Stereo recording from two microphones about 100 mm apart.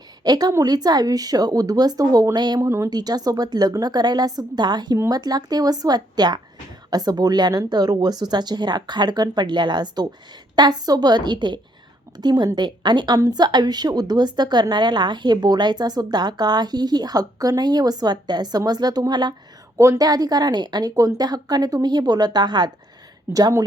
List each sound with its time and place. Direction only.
0.3 s a woman's voice: 40° right (ahead or behind)
2.6 s speech: 30° right (ahead or behind)
2.9 s a woman's voice: 40° right (ahead or behind)
19.7 s a woman's voice: 30° right (ahead or behind); by 22.7 s 45° right (ahead or behind)
23.3 s a woman's voice: 35° right (ahead or behind)